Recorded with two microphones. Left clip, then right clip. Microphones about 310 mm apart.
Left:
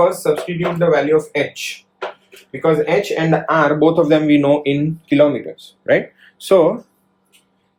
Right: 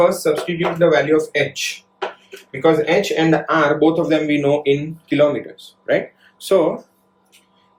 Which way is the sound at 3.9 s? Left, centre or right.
Centre.